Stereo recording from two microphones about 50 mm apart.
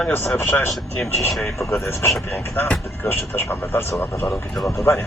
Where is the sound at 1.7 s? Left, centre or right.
Left.